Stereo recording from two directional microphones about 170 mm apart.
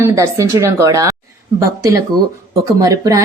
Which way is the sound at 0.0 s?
20° right (ahead or behind).